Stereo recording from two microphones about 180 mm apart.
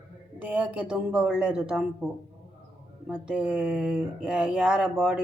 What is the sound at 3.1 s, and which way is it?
Speech, 5° right (ahead or behind).